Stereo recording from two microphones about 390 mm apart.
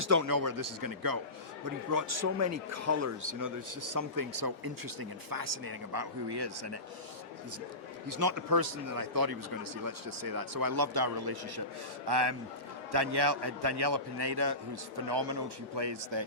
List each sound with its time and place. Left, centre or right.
0.1 s speech: right
8.0 s speech: right
12.0 s a man's voice: right
12.9 s a man's voice: right